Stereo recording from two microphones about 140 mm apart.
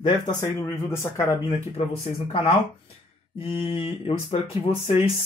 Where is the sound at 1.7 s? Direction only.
45° left (ahead or behind).